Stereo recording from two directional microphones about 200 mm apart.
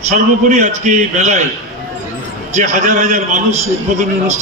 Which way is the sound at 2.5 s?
35° right (ahead or behind).